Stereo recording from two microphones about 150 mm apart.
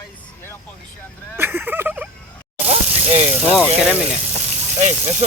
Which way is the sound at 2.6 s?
45° right (ahead or behind).